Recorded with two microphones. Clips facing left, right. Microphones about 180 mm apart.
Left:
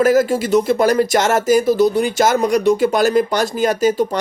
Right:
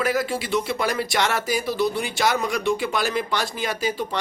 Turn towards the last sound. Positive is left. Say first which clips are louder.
# left 10 dB
turn(degrees=45)  # may be behind; listen again after turning